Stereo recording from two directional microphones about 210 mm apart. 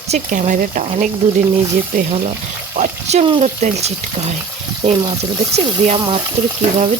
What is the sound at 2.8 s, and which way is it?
Speech, 30° right (ahead or behind).